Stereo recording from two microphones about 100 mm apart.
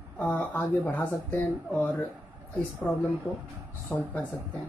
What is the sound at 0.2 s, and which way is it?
Speech, 20° left (ahead or behind).